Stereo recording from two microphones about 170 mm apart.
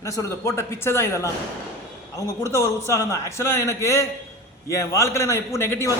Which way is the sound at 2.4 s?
15° left (ahead or behind).